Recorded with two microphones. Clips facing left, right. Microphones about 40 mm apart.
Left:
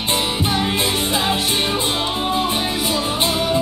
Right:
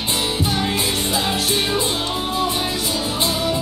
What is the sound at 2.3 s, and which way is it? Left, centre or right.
Music, left.